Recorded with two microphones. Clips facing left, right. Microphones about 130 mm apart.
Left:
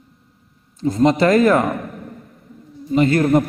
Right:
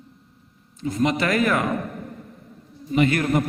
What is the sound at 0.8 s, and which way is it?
Speech, 35° left (ahead or behind).